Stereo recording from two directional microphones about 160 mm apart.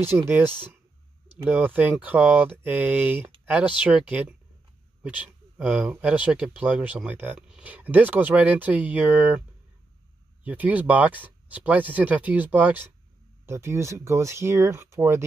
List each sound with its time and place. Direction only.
0.0 s speech: 15° right (ahead or behind)
10.4 s speech: 10° right (ahead or behind)